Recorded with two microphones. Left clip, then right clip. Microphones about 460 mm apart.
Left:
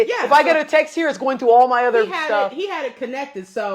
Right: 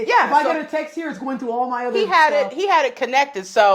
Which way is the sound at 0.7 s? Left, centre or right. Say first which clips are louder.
Left 8 dB; left.